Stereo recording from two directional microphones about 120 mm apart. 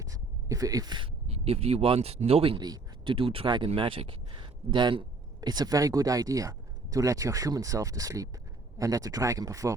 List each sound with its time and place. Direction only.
0.0 s a sound: 30° right (ahead or behind)
1.3 s speech: 60° right (ahead or behind)
2.6 s speech: 40° right (ahead or behind)